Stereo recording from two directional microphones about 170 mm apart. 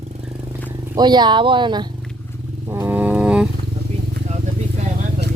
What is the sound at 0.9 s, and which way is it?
Speech, 25° right (ahead or behind).